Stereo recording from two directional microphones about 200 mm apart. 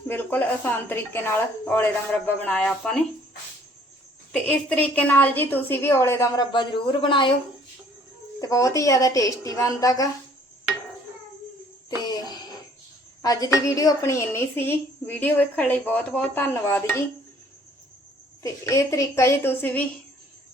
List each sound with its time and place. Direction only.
0.1 s a woman's voice: 10° left (ahead or behind)
4.3 s a woman's voice: 5° left (ahead or behind); by 7.3 s 25° left (ahead or behind)
8.4 s a woman's voice: 15° left (ahead or behind)
11.9 s music: 20° left (ahead or behind)
13.2 s a woman's voice: 20° left (ahead or behind)
18.4 s a woman's voice: 15° left (ahead or behind)